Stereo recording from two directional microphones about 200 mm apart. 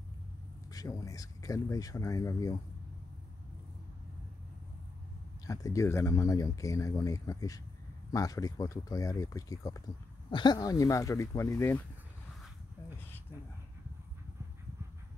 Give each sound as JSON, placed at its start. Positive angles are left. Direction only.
{"t": 0.7, "sound": "speech", "side_deg": 15}
{"t": 5.5, "sound": "speech", "side_deg": 15}